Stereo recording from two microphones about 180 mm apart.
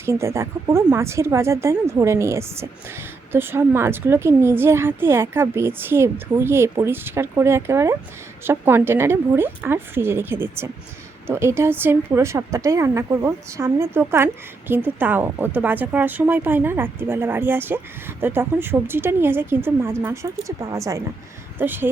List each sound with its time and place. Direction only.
0.0 s speech: 15° right (ahead or behind)
21.6 s speech: 10° right (ahead or behind)